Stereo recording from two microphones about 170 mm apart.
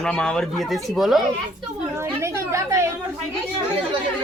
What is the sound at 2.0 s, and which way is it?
Speech, 15° right (ahead or behind).